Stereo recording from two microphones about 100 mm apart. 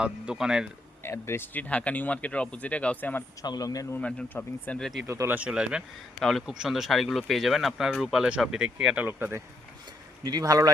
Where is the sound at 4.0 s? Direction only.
15° left (ahead or behind).